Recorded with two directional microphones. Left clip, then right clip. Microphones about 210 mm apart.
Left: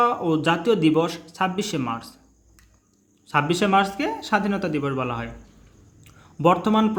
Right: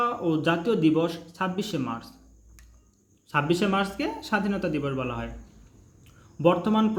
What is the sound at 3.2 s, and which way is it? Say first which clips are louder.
Speech: left 4 dB; 10° left (ahead or behind).